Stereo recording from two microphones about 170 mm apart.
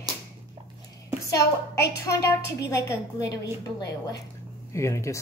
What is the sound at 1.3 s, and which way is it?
A woman's voice, 15° left (ahead or behind).